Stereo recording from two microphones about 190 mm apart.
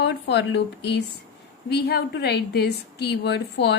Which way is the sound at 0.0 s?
65° left (ahead or behind).